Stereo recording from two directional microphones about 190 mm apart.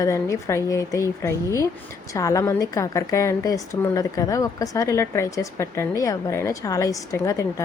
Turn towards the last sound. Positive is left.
turn(degrees=15)  # may be behind; listen again after turning